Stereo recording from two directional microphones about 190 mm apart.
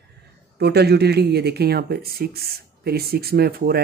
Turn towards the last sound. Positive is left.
turn(degrees=-55)  # may be behind; listen again after turning